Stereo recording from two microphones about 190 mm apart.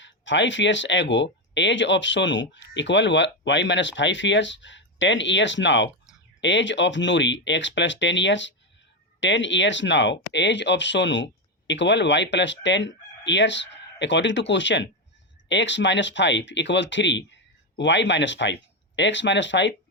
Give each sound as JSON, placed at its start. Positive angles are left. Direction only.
{"t": 0.0, "sound": "speech", "side_deg": 75}